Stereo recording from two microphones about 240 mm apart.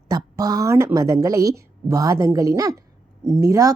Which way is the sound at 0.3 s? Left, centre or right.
Centre.